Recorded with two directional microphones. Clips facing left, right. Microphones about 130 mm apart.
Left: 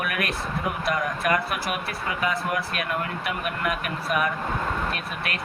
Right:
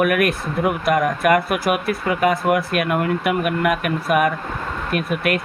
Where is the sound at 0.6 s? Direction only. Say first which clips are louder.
Right 9 dB; 50° right (ahead or behind).